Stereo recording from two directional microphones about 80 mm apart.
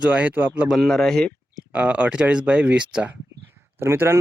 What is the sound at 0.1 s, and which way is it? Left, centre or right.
Speech, centre.